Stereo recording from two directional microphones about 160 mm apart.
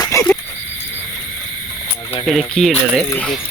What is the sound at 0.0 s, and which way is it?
Snake, 20° left (ahead or behind).